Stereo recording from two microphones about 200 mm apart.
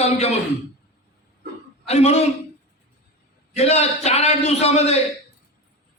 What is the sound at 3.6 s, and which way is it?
A man's voice, 30° left (ahead or behind).